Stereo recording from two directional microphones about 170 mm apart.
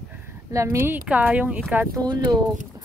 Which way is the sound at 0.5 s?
15° right (ahead or behind).